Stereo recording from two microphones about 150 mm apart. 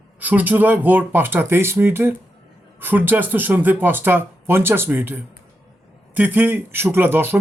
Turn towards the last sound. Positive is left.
turn(degrees=-15)  # may be behind; listen again after turning